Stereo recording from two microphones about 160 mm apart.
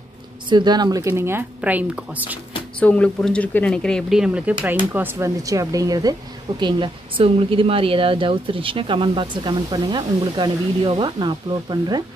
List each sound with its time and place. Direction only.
0.5 s speech: 25° right (ahead or behind); by 2.3 s 10° right (ahead or behind)
2.8 s speech: 5° left (ahead or behind); by 12.0 s 25° right (ahead or behind)